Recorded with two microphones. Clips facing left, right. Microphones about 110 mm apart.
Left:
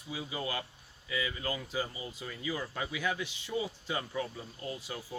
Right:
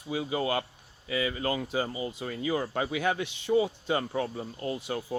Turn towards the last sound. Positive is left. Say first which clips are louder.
# right 8 dB
turn(degrees=-60)  # may be behind; listen again after turning